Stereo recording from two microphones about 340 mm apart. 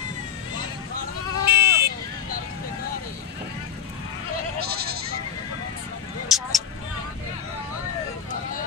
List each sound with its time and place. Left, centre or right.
1.4 s a sound: right
4.6 s goat: right
6.2 s vehicle: centre